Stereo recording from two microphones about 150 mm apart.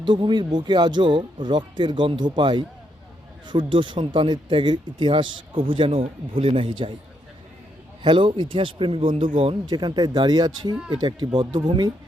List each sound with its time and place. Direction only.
0.0 s speech: 30° right (ahead or behind)
8.0 s speech: 35° right (ahead or behind)